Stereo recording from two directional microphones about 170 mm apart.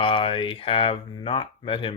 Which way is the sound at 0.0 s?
30° left (ahead or behind).